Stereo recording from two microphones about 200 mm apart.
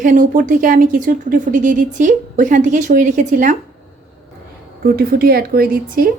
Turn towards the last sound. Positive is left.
turn(degrees=-45)  # may be behind; listen again after turning